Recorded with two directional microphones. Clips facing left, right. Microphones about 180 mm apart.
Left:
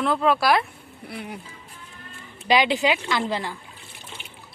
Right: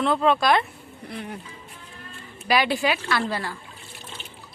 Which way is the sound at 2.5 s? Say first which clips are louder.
Left 2 dB; 20° left (ahead or behind).